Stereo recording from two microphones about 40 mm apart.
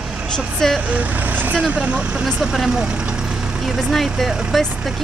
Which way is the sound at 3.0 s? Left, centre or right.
Right.